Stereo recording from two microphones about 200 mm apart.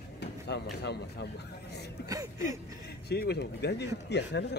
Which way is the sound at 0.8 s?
55° left (ahead or behind).